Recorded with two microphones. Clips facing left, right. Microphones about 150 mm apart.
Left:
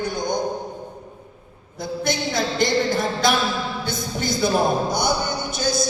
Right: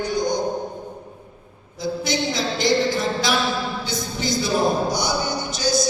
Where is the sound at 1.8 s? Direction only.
55° left (ahead or behind).